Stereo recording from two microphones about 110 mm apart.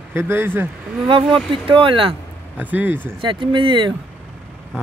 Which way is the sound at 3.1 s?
50° right (ahead or behind).